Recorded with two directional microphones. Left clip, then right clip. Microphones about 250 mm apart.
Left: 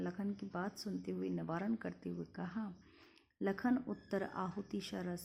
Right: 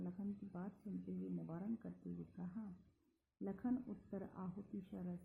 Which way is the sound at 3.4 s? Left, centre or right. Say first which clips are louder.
Left 8 dB; left.